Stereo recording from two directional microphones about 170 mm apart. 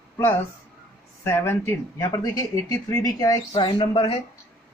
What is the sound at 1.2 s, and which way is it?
Speech, 15° left (ahead or behind).